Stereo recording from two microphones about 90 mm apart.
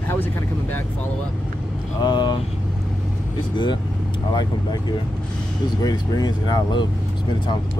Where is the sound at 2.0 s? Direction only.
55° left (ahead or behind).